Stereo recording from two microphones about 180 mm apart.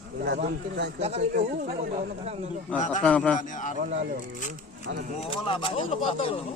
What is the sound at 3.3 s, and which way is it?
Speech, 45° left (ahead or behind).